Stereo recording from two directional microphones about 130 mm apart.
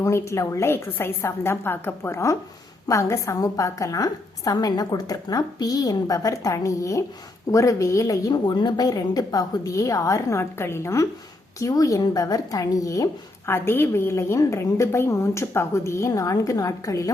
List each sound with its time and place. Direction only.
0.0 s a woman's voice: 20° left (ahead or behind)